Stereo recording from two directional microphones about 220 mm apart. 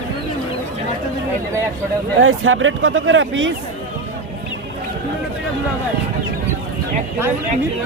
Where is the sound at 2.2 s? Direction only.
65° right (ahead or behind).